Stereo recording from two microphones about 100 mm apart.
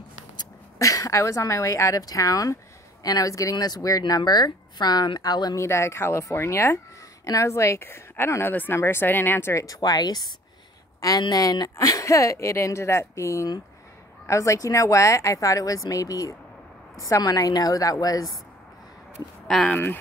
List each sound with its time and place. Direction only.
0.4 s a woman's voice: 35° left (ahead or behind)
5.6 s speech: 30° left (ahead or behind)
9.8 s speech: 40° left (ahead or behind)
19.4 s speech: 5° left (ahead or behind)
19.7 s speech: 20° left (ahead or behind)